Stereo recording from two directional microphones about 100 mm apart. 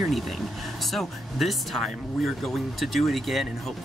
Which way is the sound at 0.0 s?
Centre (ahead or behind).